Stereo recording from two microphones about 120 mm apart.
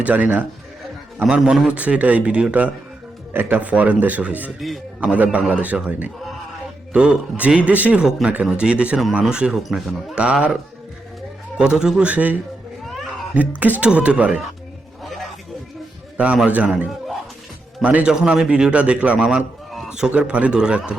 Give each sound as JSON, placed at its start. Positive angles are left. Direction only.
{"t": 0.0, "sound": "speech", "side_deg": -15}
{"t": 15.0, "sound": "music", "side_deg": 0}
{"t": 16.1, "sound": "speech", "side_deg": -10}